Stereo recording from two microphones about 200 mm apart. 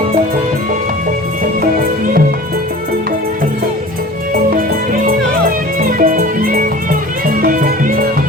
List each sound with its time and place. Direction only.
4.5 s music: 45° right (ahead or behind)